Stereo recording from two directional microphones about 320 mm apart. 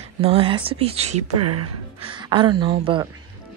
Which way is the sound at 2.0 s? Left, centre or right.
Centre.